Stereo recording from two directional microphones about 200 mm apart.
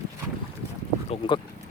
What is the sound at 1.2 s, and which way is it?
Speech, 25° left (ahead or behind).